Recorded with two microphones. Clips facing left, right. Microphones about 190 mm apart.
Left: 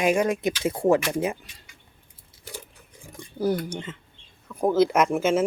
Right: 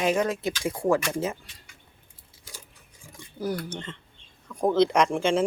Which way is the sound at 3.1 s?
30° left (ahead or behind).